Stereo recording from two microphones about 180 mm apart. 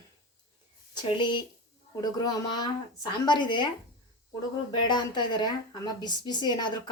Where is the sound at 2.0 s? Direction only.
20° left (ahead or behind).